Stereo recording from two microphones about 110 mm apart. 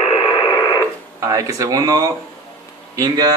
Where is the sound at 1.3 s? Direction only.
30° right (ahead or behind).